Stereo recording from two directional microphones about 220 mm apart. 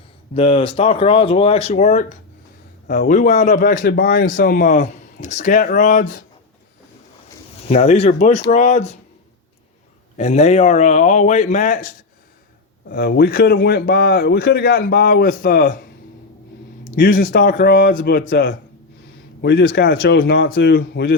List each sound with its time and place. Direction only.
0.3 s a man's voice: 25° left (ahead or behind)
7.7 s speech: 30° left (ahead or behind)
10.2 s a man's voice: 30° left (ahead or behind)
16.8 s a man's voice: 40° left (ahead or behind)